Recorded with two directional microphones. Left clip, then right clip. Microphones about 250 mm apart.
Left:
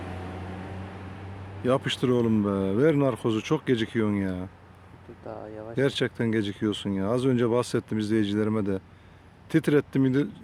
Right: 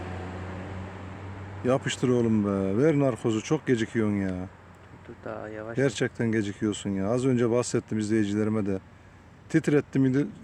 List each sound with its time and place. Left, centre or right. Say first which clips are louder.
1.6 s speech: left 1 dB; centre
5.4 s speech: right 2 dB; right
5.7 s speech: left 1 dB; centre